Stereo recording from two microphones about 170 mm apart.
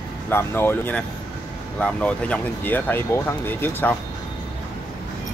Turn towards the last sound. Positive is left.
turn(degrees=10)  # may be behind; listen again after turning